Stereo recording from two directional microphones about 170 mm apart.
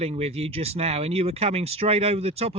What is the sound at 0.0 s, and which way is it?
Speech, 35° right (ahead or behind).